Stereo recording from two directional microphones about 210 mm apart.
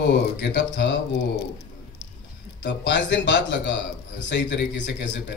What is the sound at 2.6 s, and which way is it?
Speech, 55° left (ahead or behind).